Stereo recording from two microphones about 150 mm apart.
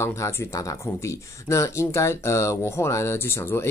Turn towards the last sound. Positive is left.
turn(degrees=15)  # may be behind; listen again after turning